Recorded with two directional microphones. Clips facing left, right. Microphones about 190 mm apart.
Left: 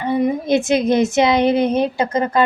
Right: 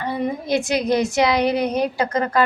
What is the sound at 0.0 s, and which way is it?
A woman's voice, 15° left (ahead or behind).